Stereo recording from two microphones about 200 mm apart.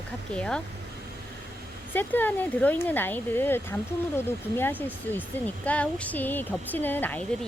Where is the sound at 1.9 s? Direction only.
10° left (ahead or behind).